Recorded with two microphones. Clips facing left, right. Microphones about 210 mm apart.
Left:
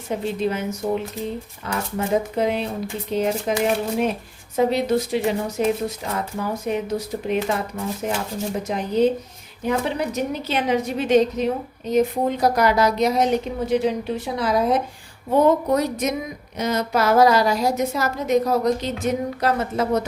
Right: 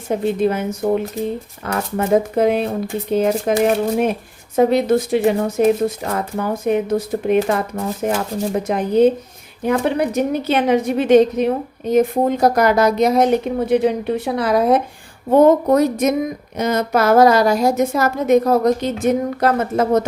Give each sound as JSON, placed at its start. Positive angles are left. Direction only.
{"t": 0.1, "sound": "a woman's voice", "side_deg": -55}